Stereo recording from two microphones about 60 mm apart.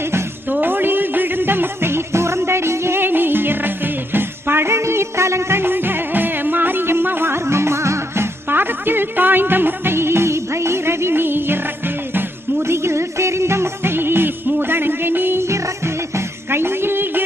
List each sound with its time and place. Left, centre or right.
0.0 s music: right
0.4 s music: right
15.4 s music: right